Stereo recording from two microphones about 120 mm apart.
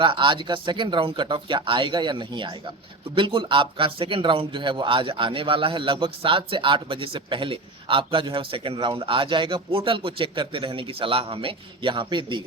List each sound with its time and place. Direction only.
0.0 s a man's voice: 45° right (ahead or behind)